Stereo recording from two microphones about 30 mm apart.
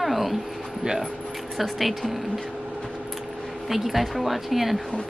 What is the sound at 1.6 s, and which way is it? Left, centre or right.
Speech, centre.